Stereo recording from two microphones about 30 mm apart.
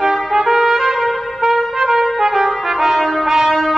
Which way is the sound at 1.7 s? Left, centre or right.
Centre.